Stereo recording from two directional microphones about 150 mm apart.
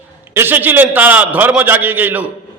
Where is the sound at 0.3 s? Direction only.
15° right (ahead or behind).